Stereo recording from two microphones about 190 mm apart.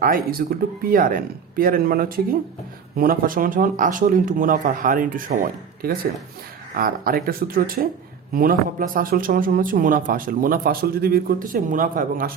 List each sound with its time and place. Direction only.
0.0 s speech: 50° right (ahead or behind)